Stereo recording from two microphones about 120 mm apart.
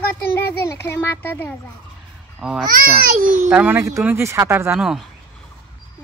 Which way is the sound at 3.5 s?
15° right (ahead or behind).